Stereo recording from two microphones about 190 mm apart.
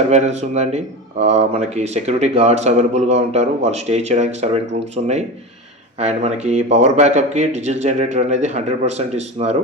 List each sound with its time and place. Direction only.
0.1 s speech: 35° right (ahead or behind)